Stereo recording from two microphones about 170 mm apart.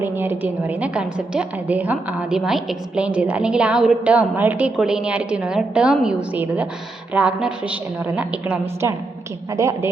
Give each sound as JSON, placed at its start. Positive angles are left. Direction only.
{"t": 0.0, "sound": "a woman's voice", "side_deg": -10}